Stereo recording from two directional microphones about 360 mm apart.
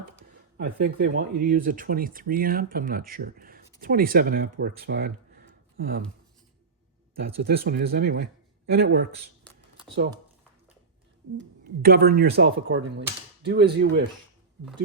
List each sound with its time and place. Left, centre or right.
0.3 s speech: right
7.3 s speech: right
11.3 s speech: right